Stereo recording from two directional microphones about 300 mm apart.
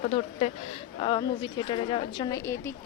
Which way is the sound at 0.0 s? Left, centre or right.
Left.